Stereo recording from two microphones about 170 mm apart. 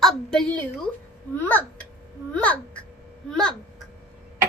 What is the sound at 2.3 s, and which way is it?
Babbling, 10° left (ahead or behind).